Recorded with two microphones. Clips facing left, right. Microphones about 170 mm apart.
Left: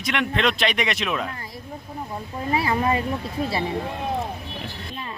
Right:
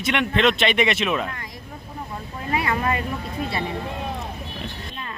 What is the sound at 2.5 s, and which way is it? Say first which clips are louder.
Speech: left 1 dB; 30° left (ahead or behind).